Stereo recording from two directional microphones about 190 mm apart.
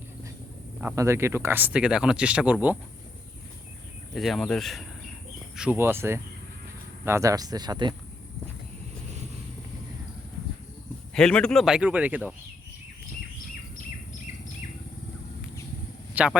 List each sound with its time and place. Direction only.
0.8 s speech: 10° right (ahead or behind)
4.1 s speech: centre (ahead or behind)
5.5 s speech: 10° right (ahead or behind)
11.1 s speech: 5° left (ahead or behind)
16.1 s a man's voice: 5° right (ahead or behind)